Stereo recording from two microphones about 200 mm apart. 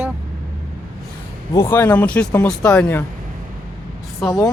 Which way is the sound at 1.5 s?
10° left (ahead or behind).